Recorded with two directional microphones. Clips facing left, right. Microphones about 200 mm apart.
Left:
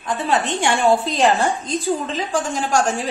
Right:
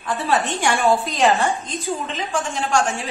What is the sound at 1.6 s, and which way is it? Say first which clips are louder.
A woman's voice: left 5 dB; 35° left (ahead or behind).